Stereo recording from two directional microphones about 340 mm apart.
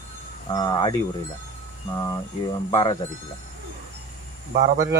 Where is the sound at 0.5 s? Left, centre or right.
Centre.